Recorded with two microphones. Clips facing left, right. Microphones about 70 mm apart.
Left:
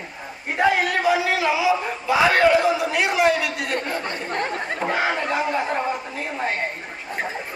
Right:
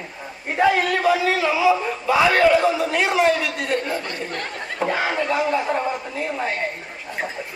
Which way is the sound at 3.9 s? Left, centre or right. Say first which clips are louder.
Left 2 dB; left.